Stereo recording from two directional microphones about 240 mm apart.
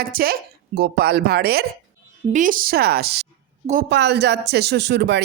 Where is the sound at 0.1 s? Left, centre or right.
Right.